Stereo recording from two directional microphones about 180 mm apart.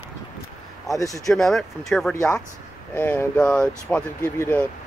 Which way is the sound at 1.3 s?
Centre (ahead or behind).